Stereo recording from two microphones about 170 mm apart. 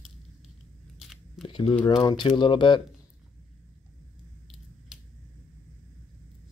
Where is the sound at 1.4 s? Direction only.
30° left (ahead or behind).